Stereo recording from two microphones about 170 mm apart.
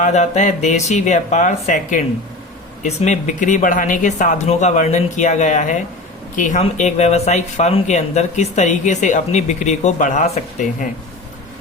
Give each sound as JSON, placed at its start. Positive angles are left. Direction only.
{"t": 0.0, "sound": "speech", "side_deg": 45}